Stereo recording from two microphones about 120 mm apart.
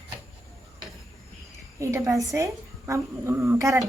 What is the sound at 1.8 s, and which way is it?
A woman's voice, 25° right (ahead or behind).